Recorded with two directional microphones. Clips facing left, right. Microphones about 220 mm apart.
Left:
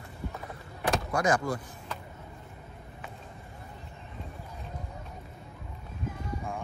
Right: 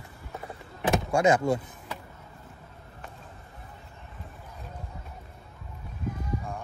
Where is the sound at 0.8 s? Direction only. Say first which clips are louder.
Right 4 dB; 25° right (ahead or behind).